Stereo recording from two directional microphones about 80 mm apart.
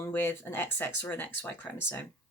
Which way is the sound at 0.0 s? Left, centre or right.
Left.